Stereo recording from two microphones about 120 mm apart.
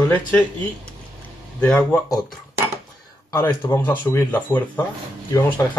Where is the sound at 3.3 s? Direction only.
25° left (ahead or behind).